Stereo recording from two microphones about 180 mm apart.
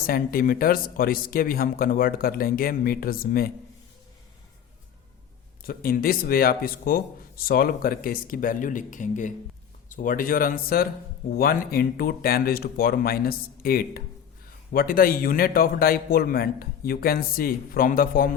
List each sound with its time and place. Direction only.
0.1 s a man's voice: 55° left (ahead or behind)
5.6 s a man's voice: 55° left (ahead or behind)